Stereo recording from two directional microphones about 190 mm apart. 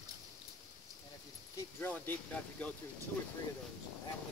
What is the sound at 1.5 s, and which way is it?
Speech, 10° left (ahead or behind).